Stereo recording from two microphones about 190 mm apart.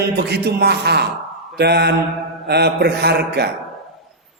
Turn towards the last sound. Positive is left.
turn(degrees=-60)  # may be behind; listen again after turning